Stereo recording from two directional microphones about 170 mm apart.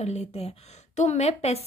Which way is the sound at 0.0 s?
40° left (ahead or behind).